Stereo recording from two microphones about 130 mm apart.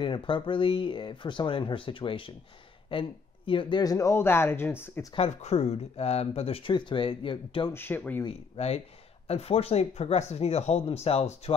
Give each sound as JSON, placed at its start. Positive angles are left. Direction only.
{"t": 0.0, "sound": "speech", "side_deg": 40}
{"t": 5.1, "sound": "speech", "side_deg": 55}
{"t": 7.7, "sound": "speech", "side_deg": 15}
{"t": 8.5, "sound": "speech", "side_deg": 50}